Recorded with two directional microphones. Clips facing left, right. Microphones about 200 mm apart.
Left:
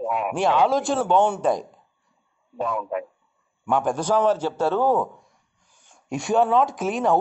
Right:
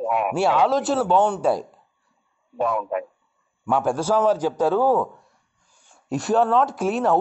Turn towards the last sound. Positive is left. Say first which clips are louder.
# right 1 dB
turn(degrees=-5)  # may be behind; listen again after turning